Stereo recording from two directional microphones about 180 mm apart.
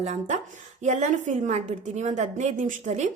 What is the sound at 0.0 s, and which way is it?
A woman's voice, 40° right (ahead or behind).